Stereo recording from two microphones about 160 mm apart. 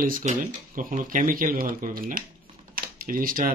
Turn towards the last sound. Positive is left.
turn(degrees=-60)  # may be behind; listen again after turning